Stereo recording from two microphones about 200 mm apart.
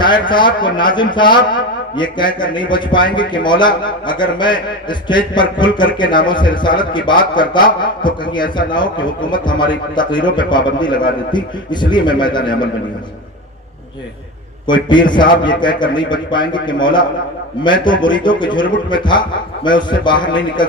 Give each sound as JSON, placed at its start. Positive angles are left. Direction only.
{"t": 0.0, "sound": "a man's voice", "side_deg": 25}
{"t": 14.7, "sound": "a man's voice", "side_deg": 25}